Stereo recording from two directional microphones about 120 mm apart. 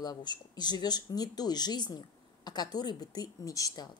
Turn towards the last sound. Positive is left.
turn(degrees=30)  # may be behind; listen again after turning